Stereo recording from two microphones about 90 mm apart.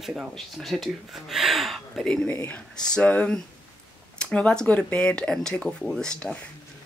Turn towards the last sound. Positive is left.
turn(degrees=10)  # may be behind; listen again after turning